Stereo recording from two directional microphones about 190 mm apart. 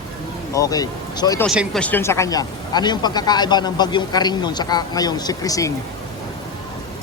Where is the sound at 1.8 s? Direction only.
10° left (ahead or behind).